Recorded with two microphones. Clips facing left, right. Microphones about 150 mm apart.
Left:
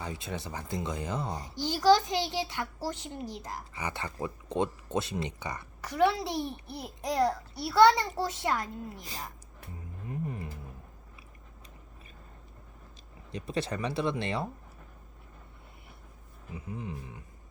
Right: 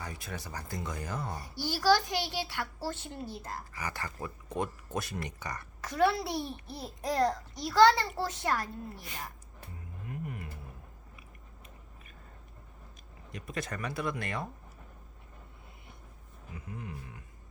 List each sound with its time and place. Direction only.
0.0 s a child's voice: 25° left (ahead or behind)
9.0 s speech: 35° left (ahead or behind)
10.1 s a sound: 30° left (ahead or behind)
13.3 s speech: 30° left (ahead or behind)
16.6 s speech: 25° left (ahead or behind)